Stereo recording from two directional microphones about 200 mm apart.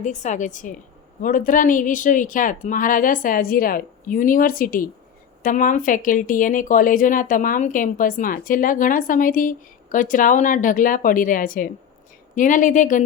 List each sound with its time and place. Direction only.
0.0 s a woman's voice: 35° left (ahead or behind)